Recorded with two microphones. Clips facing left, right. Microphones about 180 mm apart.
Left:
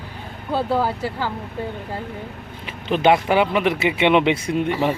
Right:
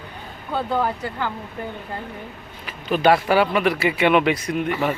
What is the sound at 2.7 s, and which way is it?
Speech, 25° left (ahead or behind).